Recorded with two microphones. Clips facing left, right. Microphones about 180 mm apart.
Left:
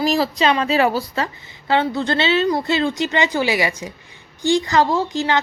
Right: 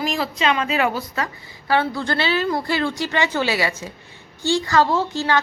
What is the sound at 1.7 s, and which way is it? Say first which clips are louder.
A woman's voice: left 2 dB; 20° left (ahead or behind).